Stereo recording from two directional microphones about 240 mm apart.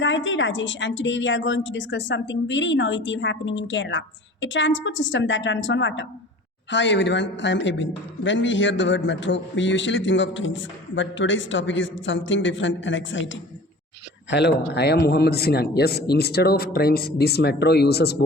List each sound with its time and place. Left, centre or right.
0.0 s a man's voice: left